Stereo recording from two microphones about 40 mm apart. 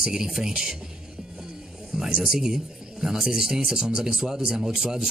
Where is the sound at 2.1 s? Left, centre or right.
Centre.